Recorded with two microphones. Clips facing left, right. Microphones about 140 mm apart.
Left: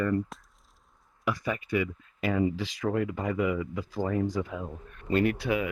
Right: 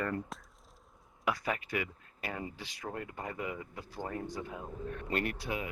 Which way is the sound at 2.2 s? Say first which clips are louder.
Left 13 dB; 90° left.